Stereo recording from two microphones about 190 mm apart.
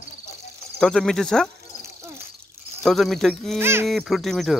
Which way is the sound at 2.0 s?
15° right (ahead or behind).